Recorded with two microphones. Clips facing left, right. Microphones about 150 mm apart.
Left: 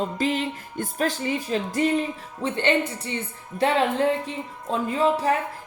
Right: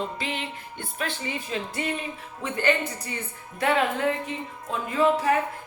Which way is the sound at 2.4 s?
25° left (ahead or behind).